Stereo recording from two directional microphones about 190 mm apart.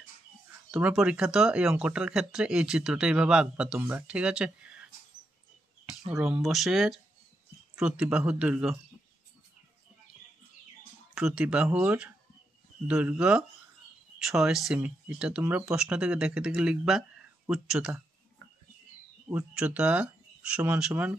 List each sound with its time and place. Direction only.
0.7 s speech: 5° right (ahead or behind)
5.9 s speech: 5° right (ahead or behind)
11.1 s speech: 5° right (ahead or behind)
19.2 s speech: 5° right (ahead or behind)